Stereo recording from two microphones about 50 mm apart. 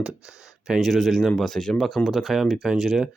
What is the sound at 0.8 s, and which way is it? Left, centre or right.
Speech, centre.